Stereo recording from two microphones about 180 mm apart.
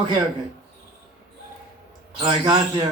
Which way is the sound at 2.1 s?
25° right (ahead or behind).